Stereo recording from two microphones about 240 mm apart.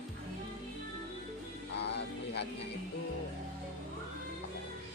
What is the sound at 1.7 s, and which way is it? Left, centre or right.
Speech, left.